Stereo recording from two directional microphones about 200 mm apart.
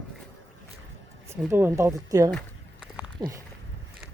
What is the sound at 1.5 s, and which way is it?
A woman's voice, 15° right (ahead or behind).